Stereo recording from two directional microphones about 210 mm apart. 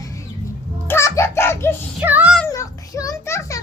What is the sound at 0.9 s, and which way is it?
Music, 15° left (ahead or behind).